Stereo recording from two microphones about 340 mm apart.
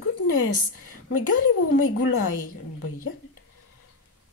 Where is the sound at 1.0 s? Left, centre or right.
Left.